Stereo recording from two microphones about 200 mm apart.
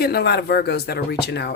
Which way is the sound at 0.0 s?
55° left (ahead or behind).